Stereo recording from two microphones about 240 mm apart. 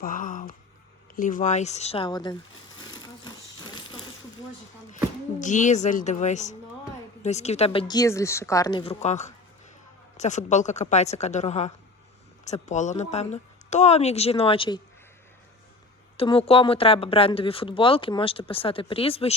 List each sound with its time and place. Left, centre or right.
0.0 s a woman's voice: left; by 2.3 s centre
2.8 s a sound: centre
5.4 s a woman's voice: left
16.1 s speech: left